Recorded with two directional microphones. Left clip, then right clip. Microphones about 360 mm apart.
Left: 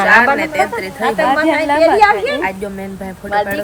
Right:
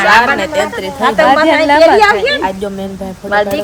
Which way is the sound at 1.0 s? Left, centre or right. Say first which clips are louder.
Right 5 dB; right.